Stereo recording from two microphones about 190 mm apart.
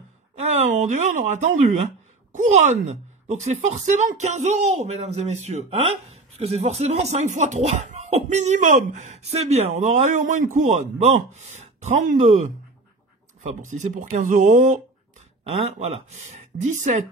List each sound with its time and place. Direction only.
0.4 s speech: 35° right (ahead or behind)
13.7 s speech: 40° right (ahead or behind)